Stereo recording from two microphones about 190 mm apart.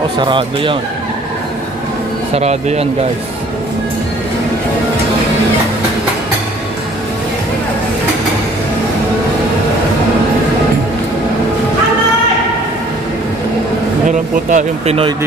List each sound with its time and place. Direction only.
0.2 s speech: 25° right (ahead or behind)
2.3 s speech: 35° right (ahead or behind)
14.0 s speech: 40° right (ahead or behind)